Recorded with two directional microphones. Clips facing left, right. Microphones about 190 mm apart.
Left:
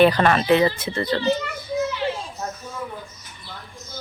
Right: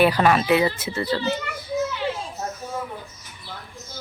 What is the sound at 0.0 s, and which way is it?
Speech, 5° right (ahead or behind).